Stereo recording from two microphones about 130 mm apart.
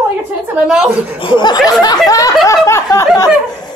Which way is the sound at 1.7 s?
30° left (ahead or behind).